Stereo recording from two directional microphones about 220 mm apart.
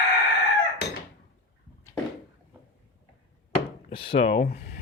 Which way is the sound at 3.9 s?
25° left (ahead or behind).